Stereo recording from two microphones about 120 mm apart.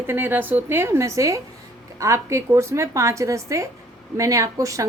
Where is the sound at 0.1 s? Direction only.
20° right (ahead or behind).